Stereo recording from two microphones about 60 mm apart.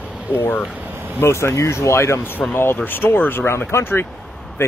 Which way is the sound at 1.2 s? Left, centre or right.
Left.